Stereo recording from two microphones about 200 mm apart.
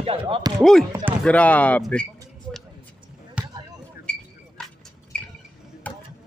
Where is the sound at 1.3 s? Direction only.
5° left (ahead or behind).